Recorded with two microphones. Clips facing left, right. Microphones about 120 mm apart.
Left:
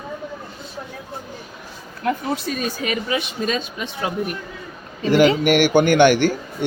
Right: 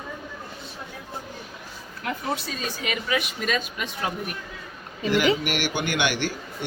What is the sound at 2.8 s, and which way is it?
A woman's voice, 35° left (ahead or behind).